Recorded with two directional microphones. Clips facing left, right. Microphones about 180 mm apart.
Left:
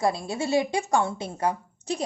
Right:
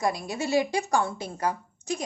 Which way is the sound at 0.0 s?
30° left (ahead or behind).